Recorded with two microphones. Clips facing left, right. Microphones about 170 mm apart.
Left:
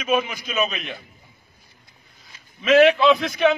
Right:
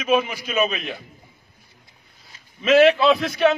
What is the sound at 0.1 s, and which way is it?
Speech, 5° right (ahead or behind).